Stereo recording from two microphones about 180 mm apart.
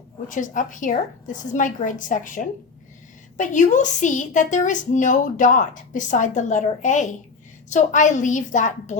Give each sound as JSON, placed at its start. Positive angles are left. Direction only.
{"t": 0.3, "sound": "a woman's voice", "side_deg": 45}